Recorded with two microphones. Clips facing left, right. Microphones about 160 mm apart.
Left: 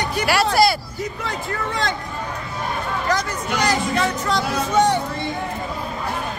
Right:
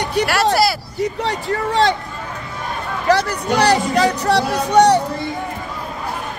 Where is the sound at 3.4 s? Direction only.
35° right (ahead or behind).